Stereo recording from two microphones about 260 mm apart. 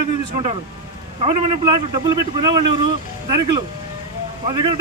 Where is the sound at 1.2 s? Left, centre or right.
Centre.